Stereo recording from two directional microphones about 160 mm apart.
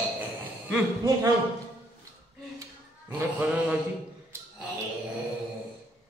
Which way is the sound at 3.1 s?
10° right (ahead or behind).